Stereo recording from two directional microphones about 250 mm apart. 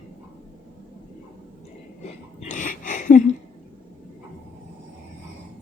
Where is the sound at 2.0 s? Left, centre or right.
Left.